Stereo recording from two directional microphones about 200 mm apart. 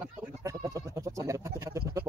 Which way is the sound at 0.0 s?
15° right (ahead or behind).